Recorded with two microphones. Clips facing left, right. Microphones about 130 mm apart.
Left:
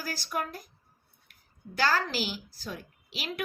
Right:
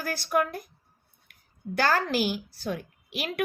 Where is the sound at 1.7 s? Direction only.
55° right (ahead or behind).